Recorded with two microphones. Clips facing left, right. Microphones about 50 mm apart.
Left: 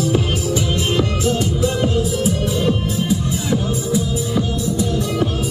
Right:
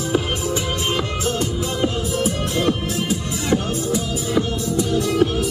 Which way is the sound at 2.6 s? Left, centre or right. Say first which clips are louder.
Left 2 dB; right.